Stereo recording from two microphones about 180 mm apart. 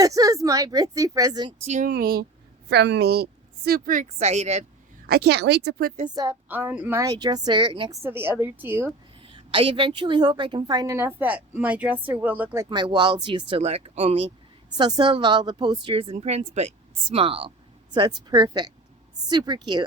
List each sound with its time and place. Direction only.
0.0 s a woman's voice: 20° right (ahead or behind)
1.6 s speech: 40° right (ahead or behind)
1.9 s a woman's voice: 55° right (ahead or behind)
2.6 s a woman's voice: 70° right (ahead or behind); by 4.6 s 40° right (ahead or behind)
5.0 s speech: 65° right (ahead or behind)
6.1 s a woman's voice: 15° right (ahead or behind)
8.0 s a woman's voice: 10° right (ahead or behind)
9.2 s a woman's voice: 30° right (ahead or behind); by 12.6 s 10° right (ahead or behind)
12.6 s a woman's voice: 25° right (ahead or behind)